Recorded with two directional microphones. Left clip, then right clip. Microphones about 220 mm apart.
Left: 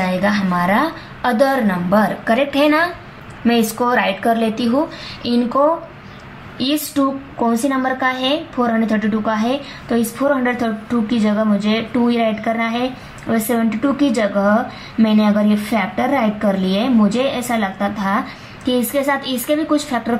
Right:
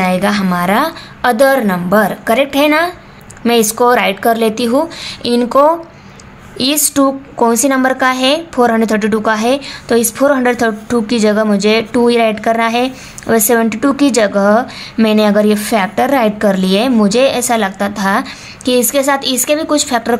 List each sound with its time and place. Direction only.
0.0 s a woman's voice: 40° right (ahead or behind)
6.6 s a woman's voice: 45° right (ahead or behind)